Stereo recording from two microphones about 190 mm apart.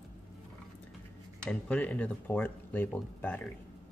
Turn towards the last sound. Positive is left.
turn(degrees=10)  # may be behind; listen again after turning